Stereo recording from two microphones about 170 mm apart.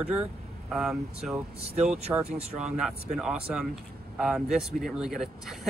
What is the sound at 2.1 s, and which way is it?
Speech, 15° right (ahead or behind).